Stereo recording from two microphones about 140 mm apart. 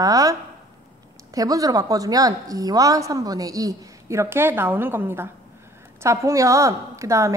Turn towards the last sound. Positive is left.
turn(degrees=-20)  # may be behind; listen again after turning